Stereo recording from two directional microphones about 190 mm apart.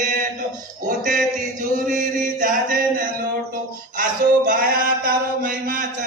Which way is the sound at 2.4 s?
45° right (ahead or behind).